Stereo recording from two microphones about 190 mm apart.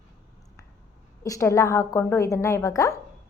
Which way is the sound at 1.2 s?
15° left (ahead or behind).